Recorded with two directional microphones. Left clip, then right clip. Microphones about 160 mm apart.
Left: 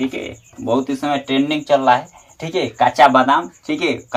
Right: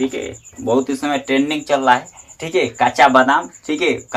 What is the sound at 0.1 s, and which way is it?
Speech, 20° right (ahead or behind).